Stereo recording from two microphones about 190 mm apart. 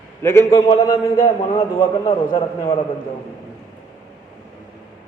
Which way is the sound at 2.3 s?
25° left (ahead or behind).